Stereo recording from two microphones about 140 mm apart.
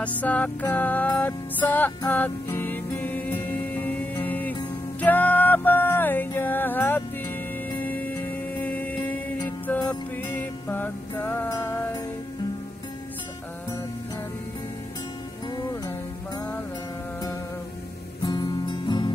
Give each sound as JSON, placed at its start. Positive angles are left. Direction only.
{"t": 0.0, "sound": "music", "side_deg": 10}
{"t": 18.2, "sound": "music", "side_deg": 30}